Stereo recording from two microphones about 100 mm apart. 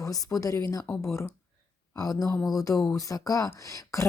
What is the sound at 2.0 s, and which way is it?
A woman's voice, 35° left (ahead or behind).